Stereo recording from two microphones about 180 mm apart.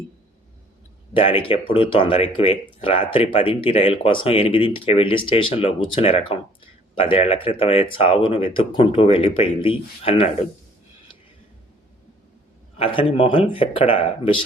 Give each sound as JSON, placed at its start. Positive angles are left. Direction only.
{"t": 1.1, "sound": "speech", "side_deg": 30}
{"t": 12.7, "sound": "speech", "side_deg": 30}